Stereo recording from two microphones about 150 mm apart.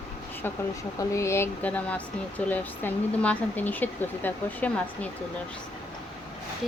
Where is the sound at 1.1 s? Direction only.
20° left (ahead or behind).